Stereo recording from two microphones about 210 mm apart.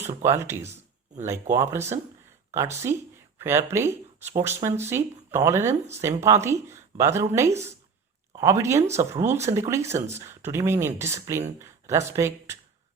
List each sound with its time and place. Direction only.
0.0 s speech: 15° right (ahead or behind)
8.9 s speech: 30° right (ahead or behind)
9.2 s speech: 10° right (ahead or behind)